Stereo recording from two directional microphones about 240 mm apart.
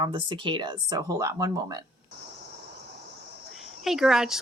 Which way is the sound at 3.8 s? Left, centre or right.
Centre.